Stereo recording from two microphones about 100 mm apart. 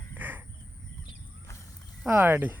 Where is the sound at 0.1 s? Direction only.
20° right (ahead or behind).